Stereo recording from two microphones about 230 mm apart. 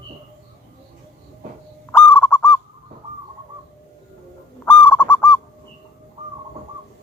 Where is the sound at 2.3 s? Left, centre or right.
Centre.